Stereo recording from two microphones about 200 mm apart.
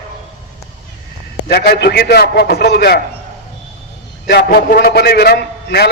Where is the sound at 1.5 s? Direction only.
55° left (ahead or behind).